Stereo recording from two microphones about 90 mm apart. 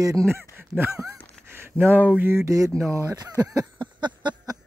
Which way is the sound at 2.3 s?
35° right (ahead or behind).